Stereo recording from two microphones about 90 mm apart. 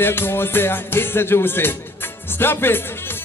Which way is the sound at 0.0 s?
25° left (ahead or behind).